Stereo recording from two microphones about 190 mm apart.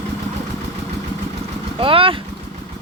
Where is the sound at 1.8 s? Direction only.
30° right (ahead or behind).